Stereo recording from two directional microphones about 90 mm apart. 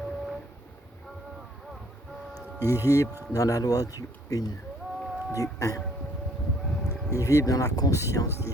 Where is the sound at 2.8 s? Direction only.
35° left (ahead or behind).